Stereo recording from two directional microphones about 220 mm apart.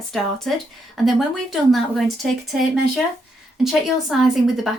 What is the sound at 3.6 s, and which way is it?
Speech, centre (ahead or behind).